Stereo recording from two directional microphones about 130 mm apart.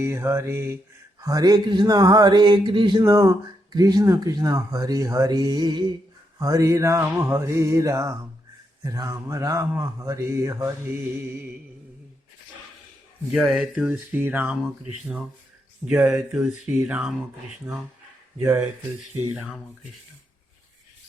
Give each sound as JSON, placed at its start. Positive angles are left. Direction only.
{"t": 0.0, "sound": "speech", "side_deg": -20}
{"t": 1.2, "sound": "a sound", "side_deg": -25}
{"t": 3.0, "sound": "speech", "side_deg": -25}
{"t": 13.3, "sound": "speech", "side_deg": -5}
{"t": 18.3, "sound": "speech", "side_deg": -15}